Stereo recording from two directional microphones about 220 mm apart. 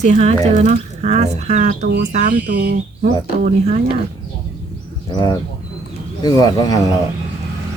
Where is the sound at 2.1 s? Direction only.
35° right (ahead or behind).